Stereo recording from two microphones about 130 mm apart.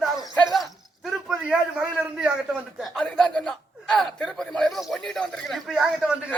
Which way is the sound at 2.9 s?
10° left (ahead or behind).